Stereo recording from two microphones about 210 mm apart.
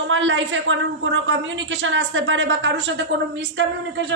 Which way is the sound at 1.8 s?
65° right (ahead or behind).